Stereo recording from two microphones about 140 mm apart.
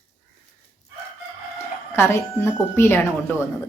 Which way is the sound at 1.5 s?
20° left (ahead or behind).